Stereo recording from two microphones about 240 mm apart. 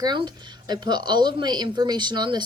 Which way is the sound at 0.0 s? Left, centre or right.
Centre.